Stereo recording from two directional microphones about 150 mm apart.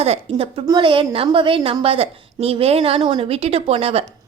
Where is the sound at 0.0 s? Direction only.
40° right (ahead or behind).